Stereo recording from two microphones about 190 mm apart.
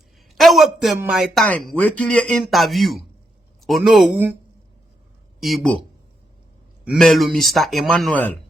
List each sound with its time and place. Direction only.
0.3 s a sound: centre (ahead or behind)
0.9 s speech: 5° right (ahead or behind)
5.4 s speech: centre (ahead or behind)
6.8 s speech: centre (ahead or behind)